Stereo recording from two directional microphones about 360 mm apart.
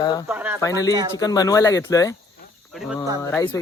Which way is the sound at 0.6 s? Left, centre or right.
Centre.